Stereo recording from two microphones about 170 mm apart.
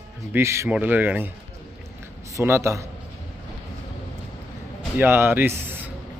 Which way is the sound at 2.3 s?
15° right (ahead or behind).